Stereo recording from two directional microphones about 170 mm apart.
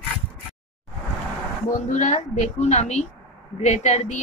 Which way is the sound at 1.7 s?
45° left (ahead or behind).